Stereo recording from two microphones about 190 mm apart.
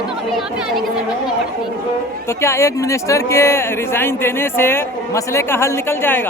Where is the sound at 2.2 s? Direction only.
15° left (ahead or behind).